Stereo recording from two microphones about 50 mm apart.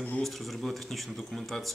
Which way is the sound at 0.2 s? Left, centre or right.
Centre.